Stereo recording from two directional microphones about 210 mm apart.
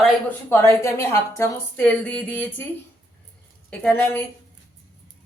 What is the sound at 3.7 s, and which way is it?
Speech, 5° left (ahead or behind).